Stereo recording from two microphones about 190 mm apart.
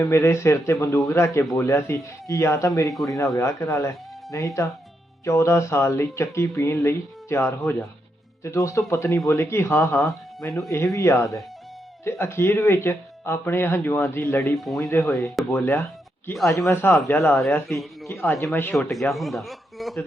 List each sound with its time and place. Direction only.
0.0 s speech: 15° left (ahead or behind)
17.7 s a man's voice: centre (ahead or behind)
18.1 s speech: 15° left (ahead or behind)